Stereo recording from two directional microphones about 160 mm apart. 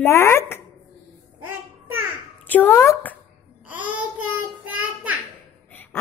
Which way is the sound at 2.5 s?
10° left (ahead or behind).